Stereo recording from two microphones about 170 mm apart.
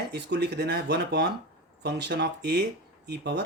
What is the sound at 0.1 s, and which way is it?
Speech, 75° right (ahead or behind).